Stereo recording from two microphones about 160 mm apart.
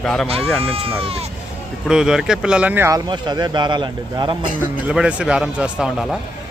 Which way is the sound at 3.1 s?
25° right (ahead or behind).